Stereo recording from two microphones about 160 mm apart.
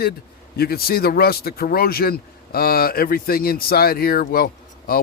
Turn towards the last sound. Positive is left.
turn(degrees=70)  # may be behind; listen again after turning